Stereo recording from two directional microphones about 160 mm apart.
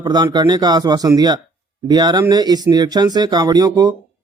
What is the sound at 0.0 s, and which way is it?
Speech, 25° right (ahead or behind).